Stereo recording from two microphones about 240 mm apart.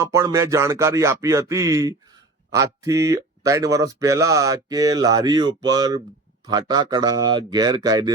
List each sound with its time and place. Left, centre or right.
0.0 s speech: centre